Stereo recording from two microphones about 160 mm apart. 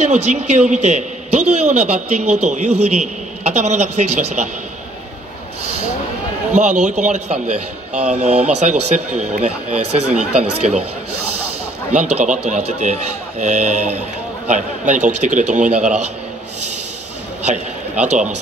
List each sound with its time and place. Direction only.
0.0 s a man's voice: 45° right (ahead or behind)
6.5 s speech: 50° right (ahead or behind)
11.9 s speech: 50° right (ahead or behind)